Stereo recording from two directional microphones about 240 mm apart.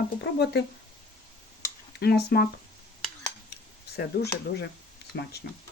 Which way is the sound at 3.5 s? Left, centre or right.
Left.